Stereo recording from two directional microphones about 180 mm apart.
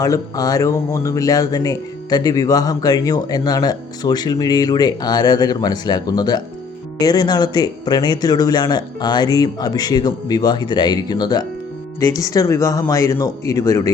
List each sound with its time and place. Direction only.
0.0 s speech: 20° left (ahead or behind)